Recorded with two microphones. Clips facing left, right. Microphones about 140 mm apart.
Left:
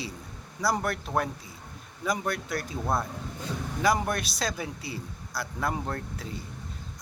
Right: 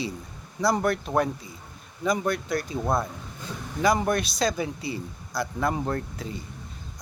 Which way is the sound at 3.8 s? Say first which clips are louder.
Right 3 dB; centre (ahead or behind).